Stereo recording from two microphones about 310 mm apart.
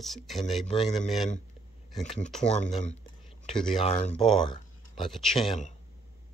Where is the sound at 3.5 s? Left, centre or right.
Centre.